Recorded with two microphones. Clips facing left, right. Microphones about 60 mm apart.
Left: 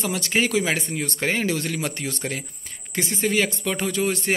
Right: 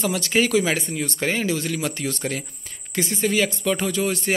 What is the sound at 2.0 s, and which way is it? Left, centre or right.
Speech, left.